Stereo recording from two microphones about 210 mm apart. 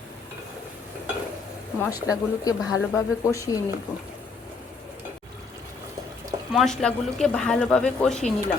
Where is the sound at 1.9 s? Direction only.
15° left (ahead or behind).